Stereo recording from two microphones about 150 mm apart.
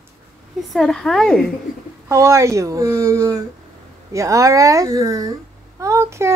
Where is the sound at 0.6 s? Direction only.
5° left (ahead or behind).